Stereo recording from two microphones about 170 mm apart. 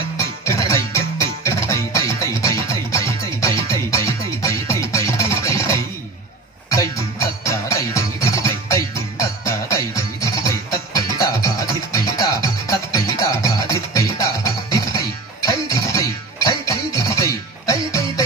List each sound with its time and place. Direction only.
0.5 s music: 20° left (ahead or behind)